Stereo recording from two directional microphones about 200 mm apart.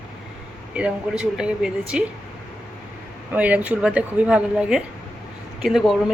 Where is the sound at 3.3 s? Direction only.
5° right (ahead or behind).